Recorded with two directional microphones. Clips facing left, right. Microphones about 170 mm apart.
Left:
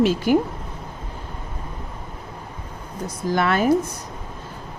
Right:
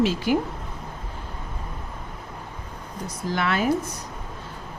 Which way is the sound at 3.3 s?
45° left (ahead or behind).